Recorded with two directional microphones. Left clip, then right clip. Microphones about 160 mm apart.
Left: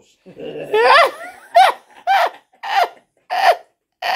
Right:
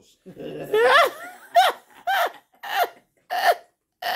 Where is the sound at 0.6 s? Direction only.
Centre (ahead or behind).